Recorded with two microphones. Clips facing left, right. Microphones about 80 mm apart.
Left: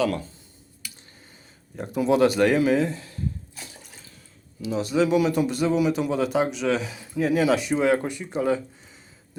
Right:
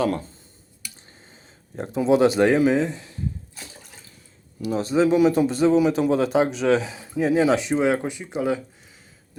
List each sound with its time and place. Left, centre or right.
0.0 s speech: right
1.7 s a man's voice: right
4.8 s a man's voice: right; by 8.6 s centre